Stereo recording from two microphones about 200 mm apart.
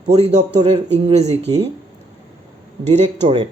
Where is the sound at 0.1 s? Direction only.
30° right (ahead or behind).